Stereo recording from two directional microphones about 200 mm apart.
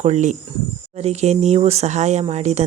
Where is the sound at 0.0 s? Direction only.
35° right (ahead or behind).